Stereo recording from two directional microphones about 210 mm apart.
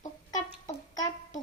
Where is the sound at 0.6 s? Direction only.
15° left (ahead or behind).